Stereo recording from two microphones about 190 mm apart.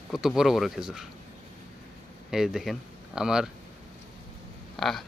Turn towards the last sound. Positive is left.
turn(degrees=0)  # may be behind; listen again after turning